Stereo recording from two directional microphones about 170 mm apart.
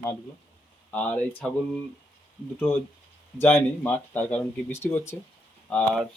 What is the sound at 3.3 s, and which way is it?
Speech, 15° left (ahead or behind).